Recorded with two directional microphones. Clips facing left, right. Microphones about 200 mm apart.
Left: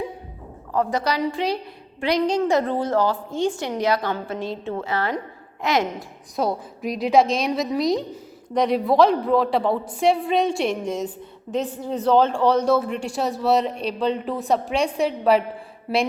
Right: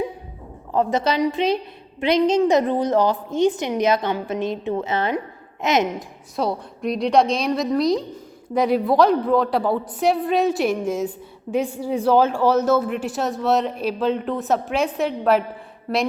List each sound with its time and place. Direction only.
0.7 s a woman's voice: 25° right (ahead or behind)
6.3 s speech: centre (ahead or behind)